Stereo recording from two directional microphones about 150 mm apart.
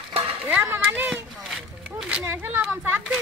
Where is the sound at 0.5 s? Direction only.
10° right (ahead or behind).